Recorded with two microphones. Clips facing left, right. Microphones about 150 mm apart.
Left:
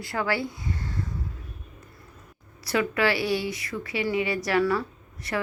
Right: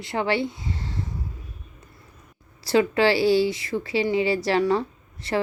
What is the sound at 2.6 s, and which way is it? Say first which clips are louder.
Speech: right 5 dB; 30° right (ahead or behind).